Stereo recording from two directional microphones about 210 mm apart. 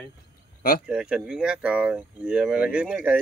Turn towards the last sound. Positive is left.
turn(degrees=-5)  # may be behind; listen again after turning